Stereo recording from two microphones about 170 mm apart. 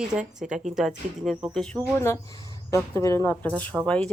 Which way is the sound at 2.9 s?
15° left (ahead or behind).